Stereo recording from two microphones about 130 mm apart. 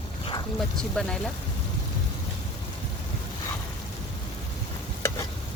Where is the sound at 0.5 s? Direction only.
5° left (ahead or behind).